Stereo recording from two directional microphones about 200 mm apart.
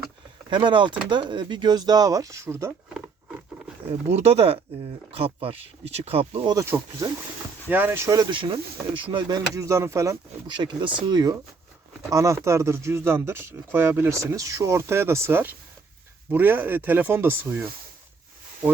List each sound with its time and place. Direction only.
0.5 s speech: 25° right (ahead or behind)
4.1 s speech: 30° right (ahead or behind); by 17.7 s 10° right (ahead or behind)